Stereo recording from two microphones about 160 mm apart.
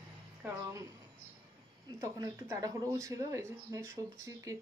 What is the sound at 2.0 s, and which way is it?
Speech, 20° right (ahead or behind).